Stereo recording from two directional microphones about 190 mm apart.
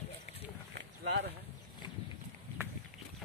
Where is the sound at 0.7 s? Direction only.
65° right (ahead or behind).